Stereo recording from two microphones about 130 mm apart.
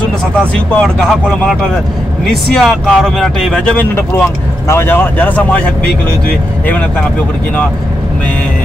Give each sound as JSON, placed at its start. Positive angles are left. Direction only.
{"t": 0.7, "sound": "speech", "side_deg": 10}
{"t": 3.9, "sound": "speech", "side_deg": 15}